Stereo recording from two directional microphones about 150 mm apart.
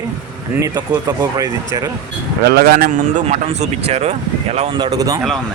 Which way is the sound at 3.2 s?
50° right (ahead or behind).